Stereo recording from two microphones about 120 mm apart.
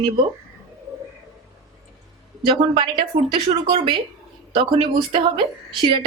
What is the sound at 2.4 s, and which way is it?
A woman's voice, 45° right (ahead or behind).